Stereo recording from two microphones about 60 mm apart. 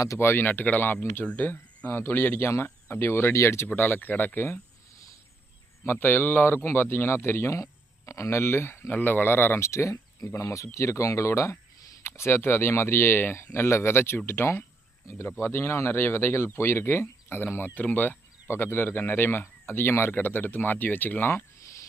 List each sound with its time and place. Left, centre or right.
0.2 s speech: left
1.9 s speech: left
3.8 s speech: left
4.4 s speech: left
5.8 s speech: left
7.5 s speech: left
13.4 s speech: left
18.4 s speech: left
21.6 s a sound: left